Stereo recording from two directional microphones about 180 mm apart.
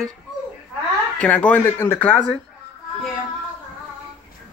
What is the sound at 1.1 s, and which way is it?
Speech, 5° left (ahead or behind).